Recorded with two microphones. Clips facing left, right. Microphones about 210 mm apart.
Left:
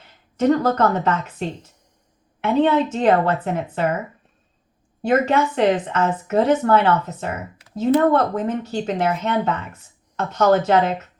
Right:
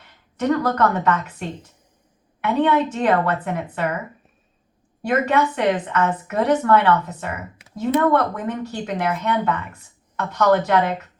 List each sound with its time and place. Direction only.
0.3 s speech: 30° left (ahead or behind)
5.0 s speech: 25° left (ahead or behind)